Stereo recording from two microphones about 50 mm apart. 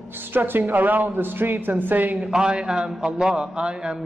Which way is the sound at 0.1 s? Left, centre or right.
Right.